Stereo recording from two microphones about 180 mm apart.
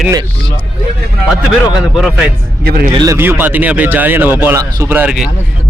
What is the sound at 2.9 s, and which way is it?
Speech, 20° right (ahead or behind).